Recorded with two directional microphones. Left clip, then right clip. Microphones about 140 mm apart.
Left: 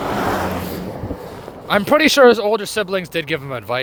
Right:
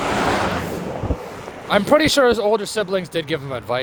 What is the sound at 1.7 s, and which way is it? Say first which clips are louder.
Speech: left 1 dB; 60° left (ahead or behind).